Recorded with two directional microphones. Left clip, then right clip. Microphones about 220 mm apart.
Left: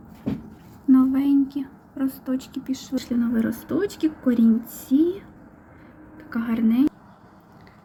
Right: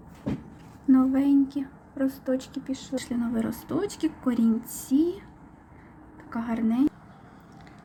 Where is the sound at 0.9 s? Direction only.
Centre (ahead or behind).